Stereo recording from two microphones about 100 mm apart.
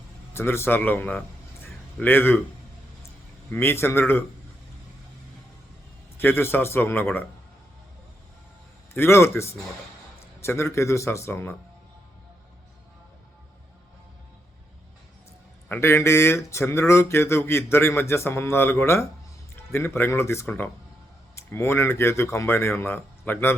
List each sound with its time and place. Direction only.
0.3 s speech: 25° left (ahead or behind)
3.5 s speech: 25° left (ahead or behind)
6.1 s speech: 25° left (ahead or behind)
8.9 s speech: 25° left (ahead or behind)
15.7 s speech: 25° left (ahead or behind)